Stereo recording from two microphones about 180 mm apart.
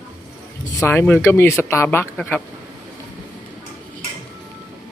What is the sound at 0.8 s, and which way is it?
Speech, 10° left (ahead or behind).